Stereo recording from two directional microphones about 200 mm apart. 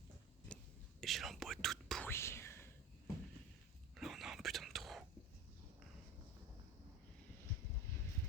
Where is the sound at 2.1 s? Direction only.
15° left (ahead or behind).